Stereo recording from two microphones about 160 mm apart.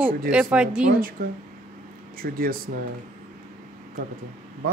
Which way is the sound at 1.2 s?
65° right (ahead or behind).